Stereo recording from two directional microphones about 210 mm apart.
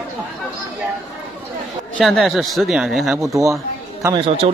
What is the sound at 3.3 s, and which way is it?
Speech, 15° right (ahead or behind).